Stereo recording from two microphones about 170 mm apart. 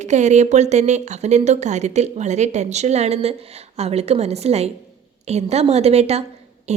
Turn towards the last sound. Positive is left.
turn(degrees=-40)  # may be behind; listen again after turning